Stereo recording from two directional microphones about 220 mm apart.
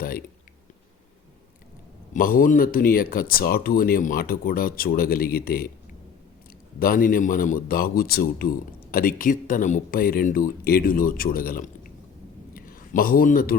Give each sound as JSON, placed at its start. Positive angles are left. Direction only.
{"t": 2.1, "sound": "speech", "side_deg": 40}
{"t": 6.7, "sound": "a man's voice", "side_deg": 40}